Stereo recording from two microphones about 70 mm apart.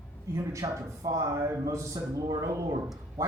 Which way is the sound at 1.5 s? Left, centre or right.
Right.